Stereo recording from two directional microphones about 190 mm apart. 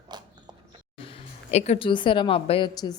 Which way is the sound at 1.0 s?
30° left (ahead or behind).